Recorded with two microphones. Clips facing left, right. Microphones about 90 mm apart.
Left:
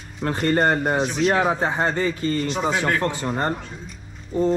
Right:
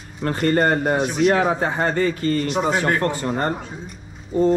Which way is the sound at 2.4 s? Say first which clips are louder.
Right 2 dB; 5° right (ahead or behind).